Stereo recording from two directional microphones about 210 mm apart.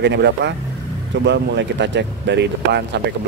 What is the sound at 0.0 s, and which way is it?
Speech, 55° right (ahead or behind).